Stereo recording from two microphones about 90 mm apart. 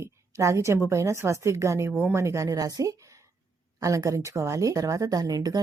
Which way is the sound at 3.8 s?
40° right (ahead or behind).